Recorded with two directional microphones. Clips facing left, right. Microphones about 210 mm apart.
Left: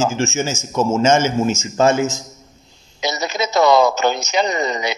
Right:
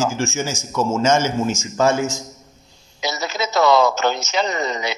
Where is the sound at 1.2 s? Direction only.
15° right (ahead or behind).